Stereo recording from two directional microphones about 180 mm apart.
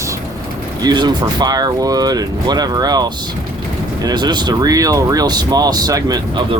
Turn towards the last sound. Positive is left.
turn(degrees=-20)  # may be behind; listen again after turning